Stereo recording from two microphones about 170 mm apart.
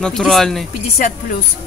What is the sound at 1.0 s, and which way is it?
Speech, 50° left (ahead or behind).